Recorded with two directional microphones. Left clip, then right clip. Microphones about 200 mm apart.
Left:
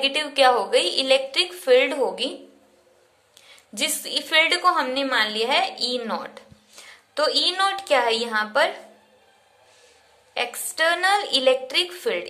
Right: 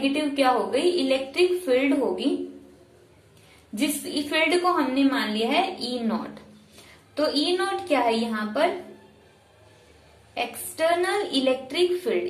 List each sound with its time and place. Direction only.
0.0 s a woman's voice: 50° left (ahead or behind)
3.7 s a woman's voice: 45° left (ahead or behind)
10.3 s a woman's voice: 45° left (ahead or behind)